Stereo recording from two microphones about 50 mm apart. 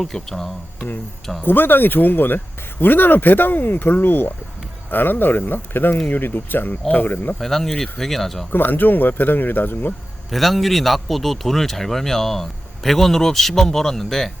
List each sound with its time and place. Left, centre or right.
0.0 s speech: centre
1.4 s speech: left
7.3 s speech: centre
8.5 s speech: left
10.3 s speech: centre